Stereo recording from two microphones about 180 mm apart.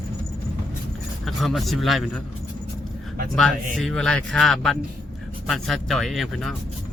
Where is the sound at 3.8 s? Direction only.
5° left (ahead or behind).